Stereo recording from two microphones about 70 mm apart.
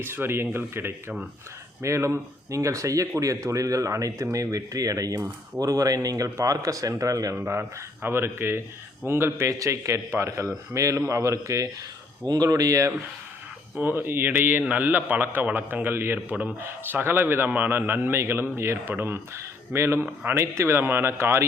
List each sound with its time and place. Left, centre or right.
0.0 s a man's voice: right
7.3 s a man's voice: right
9.5 s speech: right
12.2 s speech: right
13.7 s a man's voice: right